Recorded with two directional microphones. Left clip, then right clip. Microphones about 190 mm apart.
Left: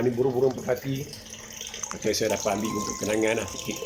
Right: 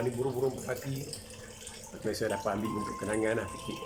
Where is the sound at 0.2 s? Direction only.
25° left (ahead or behind).